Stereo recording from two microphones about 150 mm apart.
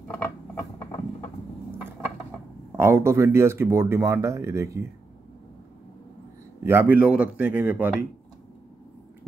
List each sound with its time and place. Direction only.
2.7 s speech: 15° right (ahead or behind)
6.6 s speech: 15° right (ahead or behind)